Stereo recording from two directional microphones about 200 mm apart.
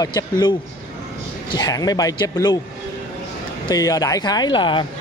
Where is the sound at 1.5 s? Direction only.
20° left (ahead or behind).